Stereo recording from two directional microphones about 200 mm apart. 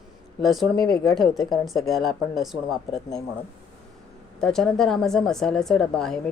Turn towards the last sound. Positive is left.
turn(degrees=0)  # may be behind; listen again after turning